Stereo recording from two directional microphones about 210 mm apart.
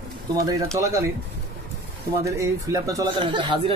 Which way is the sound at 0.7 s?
15° right (ahead or behind).